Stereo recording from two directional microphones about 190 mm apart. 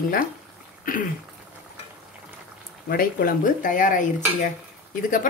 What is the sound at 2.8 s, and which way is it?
Dishes, 50° left (ahead or behind).